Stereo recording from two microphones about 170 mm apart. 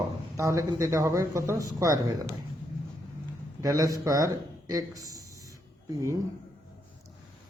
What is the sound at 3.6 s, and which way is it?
A man's voice, 20° right (ahead or behind).